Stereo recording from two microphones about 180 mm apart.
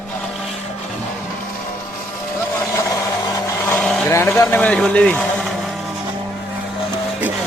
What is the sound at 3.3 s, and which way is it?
Vehicle, 15° left (ahead or behind).